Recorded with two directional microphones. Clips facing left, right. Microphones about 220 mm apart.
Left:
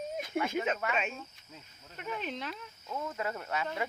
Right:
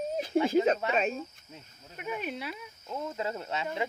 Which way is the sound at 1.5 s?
15° right (ahead or behind).